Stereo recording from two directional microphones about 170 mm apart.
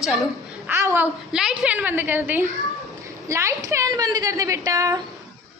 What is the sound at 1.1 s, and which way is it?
A woman's voice, 5° right (ahead or behind).